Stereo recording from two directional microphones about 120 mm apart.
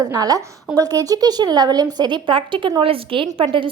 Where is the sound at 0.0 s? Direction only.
30° right (ahead or behind).